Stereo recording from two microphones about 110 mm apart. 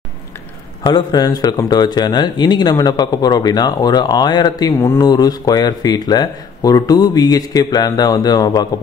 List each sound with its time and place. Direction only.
0.9 s speech: 40° left (ahead or behind)